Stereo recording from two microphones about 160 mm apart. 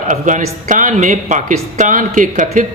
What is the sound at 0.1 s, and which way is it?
Speech, 50° right (ahead or behind).